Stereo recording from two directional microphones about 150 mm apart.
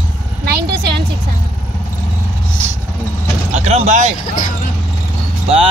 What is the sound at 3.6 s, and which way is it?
Speech, 50° right (ahead or behind).